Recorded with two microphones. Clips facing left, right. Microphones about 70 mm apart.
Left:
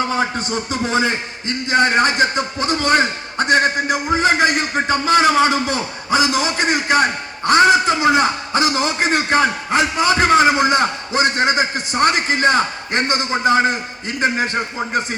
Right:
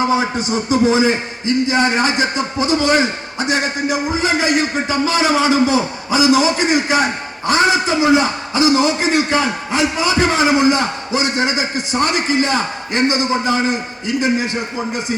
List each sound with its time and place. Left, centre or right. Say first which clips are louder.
0.2 s a man's voice: right 1 dB; left